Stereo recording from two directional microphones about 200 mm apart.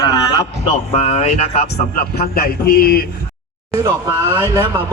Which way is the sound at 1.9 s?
50° left (ahead or behind).